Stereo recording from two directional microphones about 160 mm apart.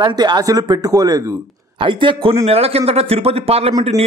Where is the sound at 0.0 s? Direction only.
25° right (ahead or behind).